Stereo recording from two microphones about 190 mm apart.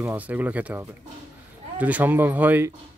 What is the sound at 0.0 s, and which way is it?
A man's voice, 10° right (ahead or behind).